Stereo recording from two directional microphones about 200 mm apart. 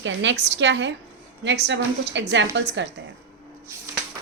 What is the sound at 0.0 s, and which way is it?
A woman's voice, 65° right (ahead or behind).